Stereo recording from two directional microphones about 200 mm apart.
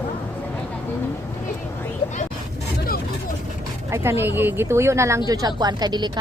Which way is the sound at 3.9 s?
10° right (ahead or behind).